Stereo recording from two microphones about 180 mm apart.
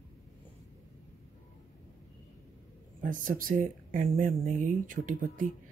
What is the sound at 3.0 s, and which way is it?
Speech, 50° right (ahead or behind).